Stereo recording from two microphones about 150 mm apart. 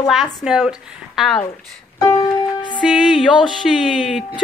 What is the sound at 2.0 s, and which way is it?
Music, 25° left (ahead or behind).